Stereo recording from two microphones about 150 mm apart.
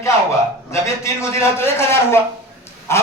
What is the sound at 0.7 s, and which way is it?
A man's voice, 20° left (ahead or behind).